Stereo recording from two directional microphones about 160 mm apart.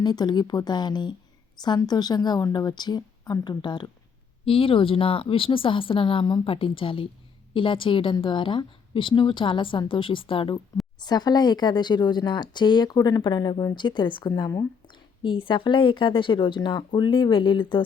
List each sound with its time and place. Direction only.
0.0 s a woman's voice: 25° left (ahead or behind)
15.2 s a woman's voice: 30° left (ahead or behind)